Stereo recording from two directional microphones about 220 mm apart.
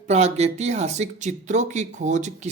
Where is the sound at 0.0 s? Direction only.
30° right (ahead or behind).